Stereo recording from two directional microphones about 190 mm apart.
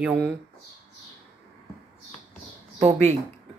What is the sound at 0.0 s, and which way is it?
Speech, 5° right (ahead or behind).